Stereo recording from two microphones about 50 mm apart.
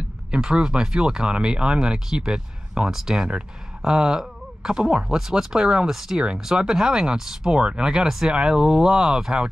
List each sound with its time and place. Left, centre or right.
0.3 s speech: centre